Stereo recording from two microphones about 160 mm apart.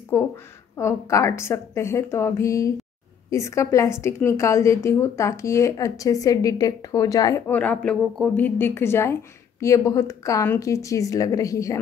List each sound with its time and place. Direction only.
0.7 s a woman's voice: 15° left (ahead or behind)